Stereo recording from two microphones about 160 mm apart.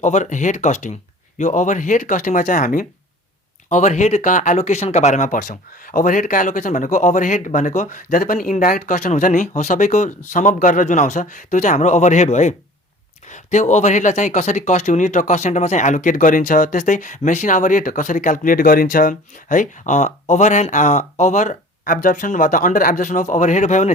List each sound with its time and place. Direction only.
0.0 s speech: 50° left (ahead or behind)